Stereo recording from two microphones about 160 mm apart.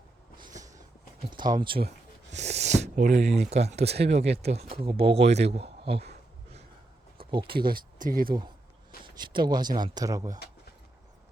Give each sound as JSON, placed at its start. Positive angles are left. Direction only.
{"t": 1.3, "sound": "speech", "side_deg": -25}
{"t": 2.3, "sound": "speech", "side_deg": -45}
{"t": 7.2, "sound": "a sound", "side_deg": -30}
{"t": 7.4, "sound": "speech", "side_deg": -70}
{"t": 9.0, "sound": "speech", "side_deg": -30}